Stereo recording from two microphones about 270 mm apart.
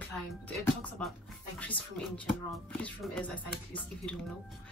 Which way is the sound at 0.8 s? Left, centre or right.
Centre.